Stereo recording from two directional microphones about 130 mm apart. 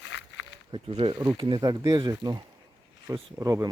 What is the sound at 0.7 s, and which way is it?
Speech, 45° right (ahead or behind).